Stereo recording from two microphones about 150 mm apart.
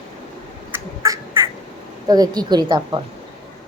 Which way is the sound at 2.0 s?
25° right (ahead or behind).